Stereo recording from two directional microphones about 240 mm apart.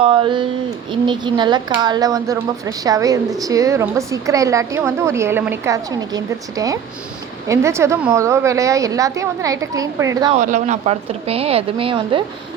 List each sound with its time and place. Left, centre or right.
0.0 s a woman's voice: right
10.3 s speech: right